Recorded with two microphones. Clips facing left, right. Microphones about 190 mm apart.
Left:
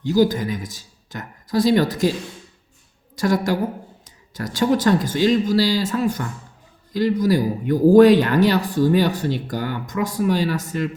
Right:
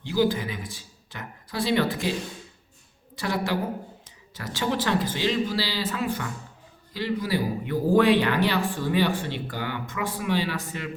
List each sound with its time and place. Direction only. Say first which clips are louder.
0.0 s speech: left 6 dB; 40° left (ahead or behind)
3.2 s speech: left 7 dB; 45° left (ahead or behind)